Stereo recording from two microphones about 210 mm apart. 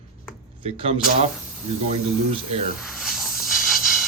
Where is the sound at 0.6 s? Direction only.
25° right (ahead or behind).